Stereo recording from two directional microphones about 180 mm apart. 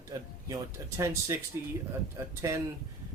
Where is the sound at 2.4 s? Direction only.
15° right (ahead or behind).